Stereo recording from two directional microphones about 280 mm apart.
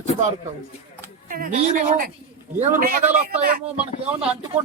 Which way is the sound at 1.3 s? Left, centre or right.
Right.